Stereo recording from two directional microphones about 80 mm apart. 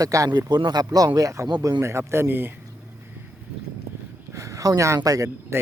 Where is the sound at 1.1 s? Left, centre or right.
Right.